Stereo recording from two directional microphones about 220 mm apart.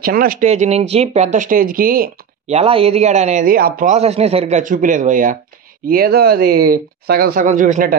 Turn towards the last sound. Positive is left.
turn(degrees=-35)  # may be behind; listen again after turning